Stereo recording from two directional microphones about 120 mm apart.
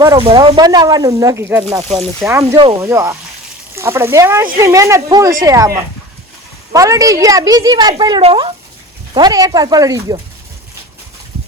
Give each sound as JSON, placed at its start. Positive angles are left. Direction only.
{"t": 0.2, "sound": "speech", "side_deg": -50}
{"t": 1.8, "sound": "speech", "side_deg": -60}
{"t": 2.3, "sound": "speech", "side_deg": -20}
{"t": 6.7, "sound": "speech", "side_deg": -30}